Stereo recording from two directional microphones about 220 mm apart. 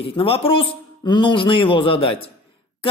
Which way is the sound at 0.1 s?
25° left (ahead or behind).